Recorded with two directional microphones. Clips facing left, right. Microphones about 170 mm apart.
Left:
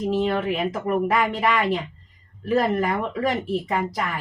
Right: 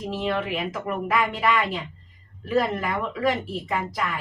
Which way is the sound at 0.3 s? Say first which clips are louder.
Left 3 dB; 40° left (ahead or behind).